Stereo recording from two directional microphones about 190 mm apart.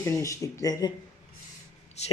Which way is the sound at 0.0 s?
15° left (ahead or behind).